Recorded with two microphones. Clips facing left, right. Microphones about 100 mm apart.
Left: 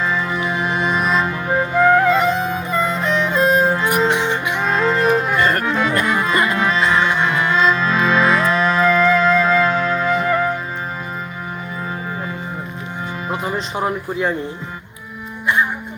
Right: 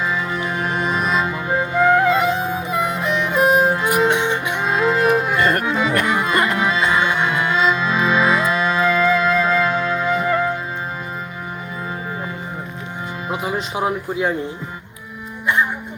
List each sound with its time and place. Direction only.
0.0 s music: 5° right (ahead or behind)
6.3 s music: 60° right (ahead or behind)
6.6 s music: 10° right (ahead or behind)
13.2 s speech: 5° right (ahead or behind)